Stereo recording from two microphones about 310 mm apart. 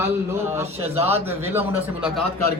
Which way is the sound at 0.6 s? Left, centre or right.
Centre.